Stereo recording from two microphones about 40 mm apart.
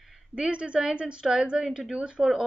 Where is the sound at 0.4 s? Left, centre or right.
Right.